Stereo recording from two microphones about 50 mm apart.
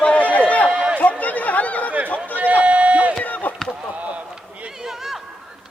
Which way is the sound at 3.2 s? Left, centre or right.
Left.